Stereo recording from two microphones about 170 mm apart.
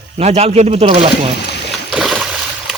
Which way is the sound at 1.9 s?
5° right (ahead or behind).